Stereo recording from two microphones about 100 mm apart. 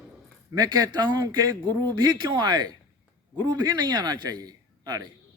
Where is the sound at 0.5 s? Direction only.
40° right (ahead or behind).